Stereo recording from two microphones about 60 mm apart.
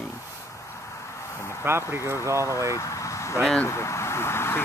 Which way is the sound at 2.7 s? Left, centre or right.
Left.